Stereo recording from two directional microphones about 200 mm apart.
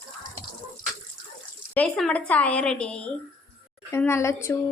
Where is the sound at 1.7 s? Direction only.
5° left (ahead or behind).